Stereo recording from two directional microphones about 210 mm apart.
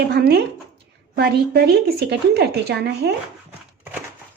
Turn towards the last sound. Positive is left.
turn(degrees=-50)  # may be behind; listen again after turning